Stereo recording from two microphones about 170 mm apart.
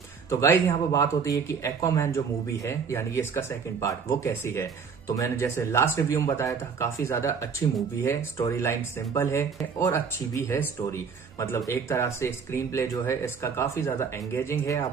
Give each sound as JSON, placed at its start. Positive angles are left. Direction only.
{"t": 0.3, "sound": "speech", "side_deg": 15}